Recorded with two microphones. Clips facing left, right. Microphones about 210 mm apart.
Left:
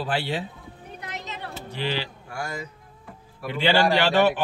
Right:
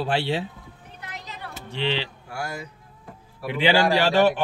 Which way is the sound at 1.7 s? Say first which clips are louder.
Right 2 dB; 25° right (ahead or behind).